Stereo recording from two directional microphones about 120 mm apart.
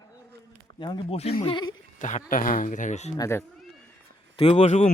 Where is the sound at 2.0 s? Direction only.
90° left.